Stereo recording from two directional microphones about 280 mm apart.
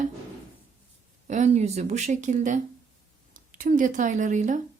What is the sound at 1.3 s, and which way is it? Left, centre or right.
Speech, right.